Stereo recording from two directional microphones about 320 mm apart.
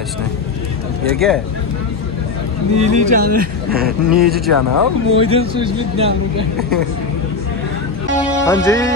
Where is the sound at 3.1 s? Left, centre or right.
Right.